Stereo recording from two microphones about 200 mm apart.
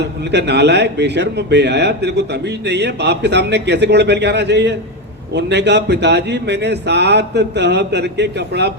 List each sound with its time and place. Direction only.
0.3 s a man's voice: 55° right (ahead or behind)